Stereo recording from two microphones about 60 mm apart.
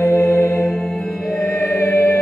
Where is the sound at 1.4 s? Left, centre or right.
Left.